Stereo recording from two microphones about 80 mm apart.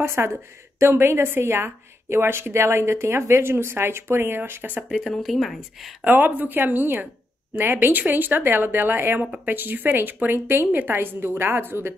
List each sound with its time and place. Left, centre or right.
0.0 s a woman's voice: right
4.8 s speech: centre
6.0 s speech: right